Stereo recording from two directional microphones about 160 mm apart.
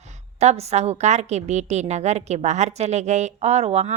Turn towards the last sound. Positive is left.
turn(degrees=-40)  # may be behind; listen again after turning